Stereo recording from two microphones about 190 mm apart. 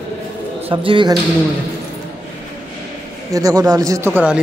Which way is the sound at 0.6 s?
25° right (ahead or behind).